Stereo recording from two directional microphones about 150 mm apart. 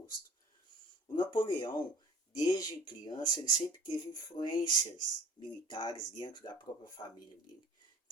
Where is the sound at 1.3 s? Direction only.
30° left (ahead or behind).